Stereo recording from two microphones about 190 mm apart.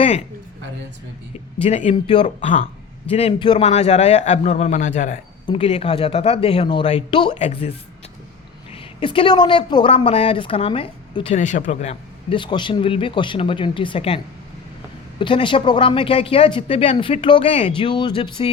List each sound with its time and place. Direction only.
1.6 s speech: 30° left (ahead or behind)
3.7 s speech: 35° left (ahead or behind)
5.5 s speech: 30° left (ahead or behind)
8.7 s speech: 25° left (ahead or behind)
15.2 s speech: 25° left (ahead or behind)